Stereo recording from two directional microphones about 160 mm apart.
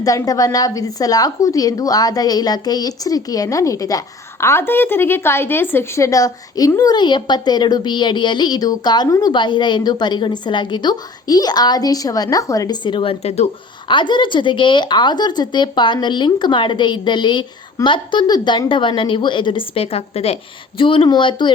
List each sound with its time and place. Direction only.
0.0 s a woman's voice: 20° left (ahead or behind)